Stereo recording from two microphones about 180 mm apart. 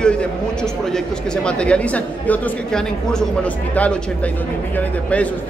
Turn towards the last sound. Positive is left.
turn(degrees=10)  # may be behind; listen again after turning